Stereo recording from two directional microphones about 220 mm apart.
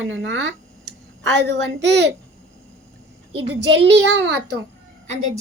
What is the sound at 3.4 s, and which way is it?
A child's voice, 50° right (ahead or behind).